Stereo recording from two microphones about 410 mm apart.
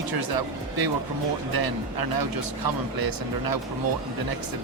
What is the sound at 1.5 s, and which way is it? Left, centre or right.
A man's voice, right.